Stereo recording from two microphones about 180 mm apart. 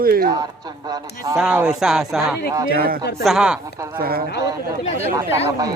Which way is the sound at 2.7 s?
55° right (ahead or behind).